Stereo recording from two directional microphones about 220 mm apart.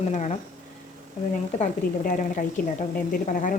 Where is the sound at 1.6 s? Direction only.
35° left (ahead or behind).